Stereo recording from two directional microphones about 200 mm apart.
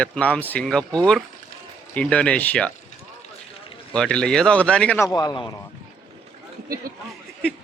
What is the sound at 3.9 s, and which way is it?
Speech, 5° left (ahead or behind).